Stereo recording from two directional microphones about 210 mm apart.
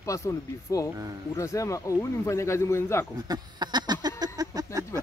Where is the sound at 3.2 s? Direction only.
20° right (ahead or behind).